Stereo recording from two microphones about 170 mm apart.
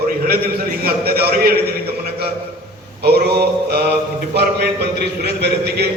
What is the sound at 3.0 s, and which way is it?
A man's voice, 70° right (ahead or behind).